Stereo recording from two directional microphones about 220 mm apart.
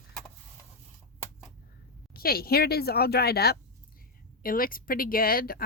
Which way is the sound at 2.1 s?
45° left (ahead or behind).